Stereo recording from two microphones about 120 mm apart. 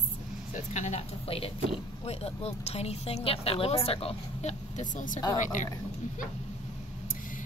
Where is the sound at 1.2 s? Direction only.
50° left (ahead or behind); by 5.2 s 90° left.